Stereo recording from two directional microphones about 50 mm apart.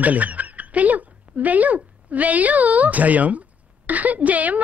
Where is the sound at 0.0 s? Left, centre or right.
Right.